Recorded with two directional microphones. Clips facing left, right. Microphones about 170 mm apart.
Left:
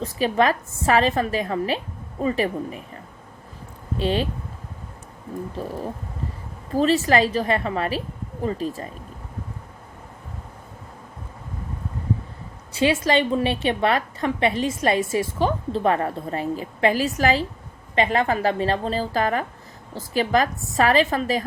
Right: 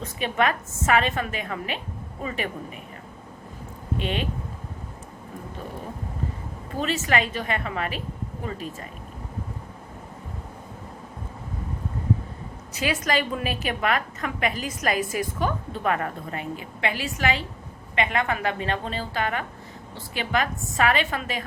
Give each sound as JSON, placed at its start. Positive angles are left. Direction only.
{"t": 0.0, "sound": "a woman's voice", "side_deg": 35}
{"t": 3.9, "sound": "a woman's voice", "side_deg": 35}
{"t": 5.6, "sound": "a woman's voice", "side_deg": 35}
{"t": 6.7, "sound": "a woman's voice", "side_deg": 35}
{"t": 12.7, "sound": "a woman's voice", "side_deg": 30}